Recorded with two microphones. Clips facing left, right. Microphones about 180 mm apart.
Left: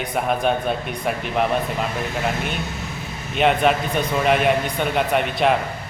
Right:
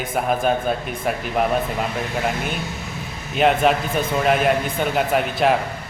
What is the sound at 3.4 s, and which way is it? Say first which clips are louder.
Speech: right 1 dB; centre (ahead or behind).